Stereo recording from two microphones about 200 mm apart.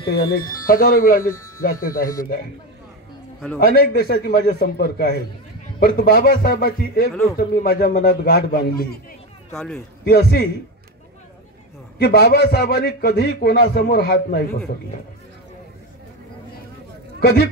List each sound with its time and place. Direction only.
0.0 s a man's voice: 50° left (ahead or behind)
3.5 s a man's voice: 50° left (ahead or behind)
9.5 s a man's voice: 5° left (ahead or behind)
10.0 s a man's voice: 50° left (ahead or behind)
12.0 s a man's voice: 55° left (ahead or behind)
17.2 s speech: 50° left (ahead or behind)